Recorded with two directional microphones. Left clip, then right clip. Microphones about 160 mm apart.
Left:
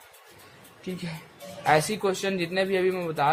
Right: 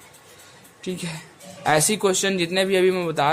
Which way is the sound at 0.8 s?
50° right (ahead or behind).